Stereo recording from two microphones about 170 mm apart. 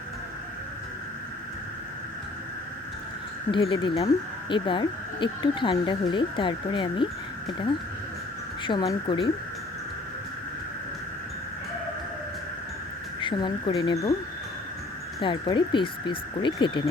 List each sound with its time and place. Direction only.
3.5 s speech: 30° left (ahead or behind)
8.6 s speech: 25° left (ahead or behind)
13.1 s speech: 30° left (ahead or behind)
15.2 s speech: 25° left (ahead or behind)